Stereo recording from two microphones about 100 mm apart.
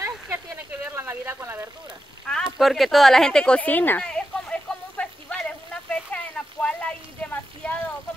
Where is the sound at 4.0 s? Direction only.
5° left (ahead or behind).